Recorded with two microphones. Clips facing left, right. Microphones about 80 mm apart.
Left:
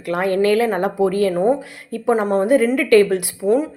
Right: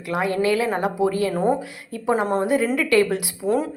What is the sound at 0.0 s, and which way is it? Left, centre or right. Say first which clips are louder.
A woman's voice: left 4 dB; left.